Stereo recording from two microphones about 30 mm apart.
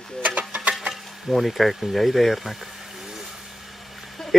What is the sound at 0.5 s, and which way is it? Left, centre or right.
Music, right.